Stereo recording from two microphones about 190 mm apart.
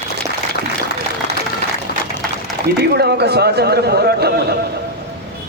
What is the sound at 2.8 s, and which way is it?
Speech, 60° right (ahead or behind).